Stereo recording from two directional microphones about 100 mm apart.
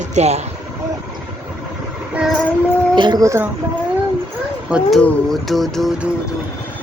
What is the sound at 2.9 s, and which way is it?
Speech, 50° right (ahead or behind).